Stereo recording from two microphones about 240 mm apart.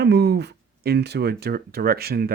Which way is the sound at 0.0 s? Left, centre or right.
Right.